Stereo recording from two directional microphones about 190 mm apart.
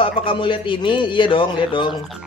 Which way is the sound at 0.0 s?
30° left (ahead or behind).